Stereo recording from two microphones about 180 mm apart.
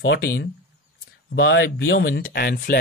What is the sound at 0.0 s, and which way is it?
Speech, 85° left.